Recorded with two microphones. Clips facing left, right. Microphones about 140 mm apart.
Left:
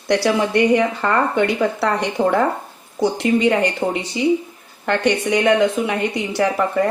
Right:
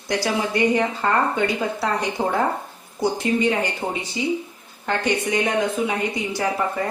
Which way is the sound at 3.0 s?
80° left.